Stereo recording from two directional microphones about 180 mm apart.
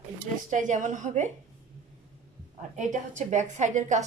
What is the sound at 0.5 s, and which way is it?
Speech, 45° right (ahead or behind).